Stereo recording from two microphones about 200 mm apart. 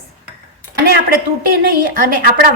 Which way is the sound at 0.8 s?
50° right (ahead or behind).